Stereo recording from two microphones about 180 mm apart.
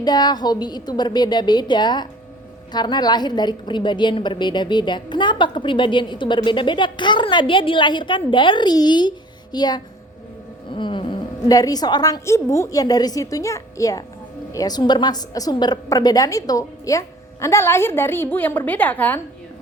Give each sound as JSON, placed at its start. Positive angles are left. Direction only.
{"t": 0.0, "sound": "a woman's voice", "side_deg": 20}